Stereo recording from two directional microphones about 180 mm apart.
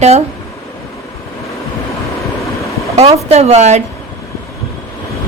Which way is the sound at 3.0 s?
35° right (ahead or behind).